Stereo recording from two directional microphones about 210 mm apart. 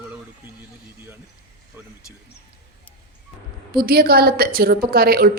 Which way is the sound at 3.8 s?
45° right (ahead or behind).